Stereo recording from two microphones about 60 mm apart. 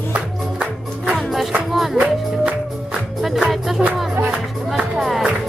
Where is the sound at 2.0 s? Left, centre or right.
Centre.